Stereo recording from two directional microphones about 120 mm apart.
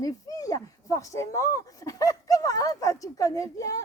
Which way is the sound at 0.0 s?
30° left (ahead or behind).